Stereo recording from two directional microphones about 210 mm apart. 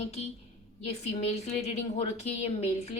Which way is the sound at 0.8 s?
30° left (ahead or behind).